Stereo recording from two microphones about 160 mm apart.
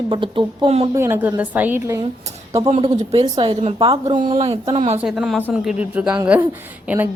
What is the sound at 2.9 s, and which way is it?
A woman's voice, 45° right (ahead or behind).